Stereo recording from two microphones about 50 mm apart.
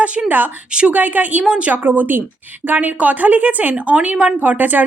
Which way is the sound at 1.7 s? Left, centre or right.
Right.